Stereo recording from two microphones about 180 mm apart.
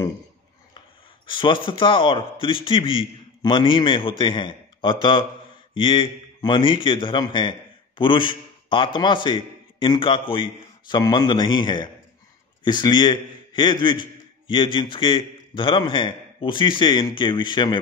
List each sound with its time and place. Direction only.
0.7 s a man's voice: 25° left (ahead or behind)